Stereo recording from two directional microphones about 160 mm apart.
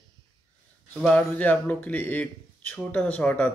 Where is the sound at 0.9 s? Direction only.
10° left (ahead or behind).